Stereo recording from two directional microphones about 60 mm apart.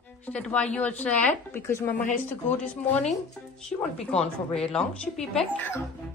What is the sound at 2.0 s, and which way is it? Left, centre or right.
Speech, left.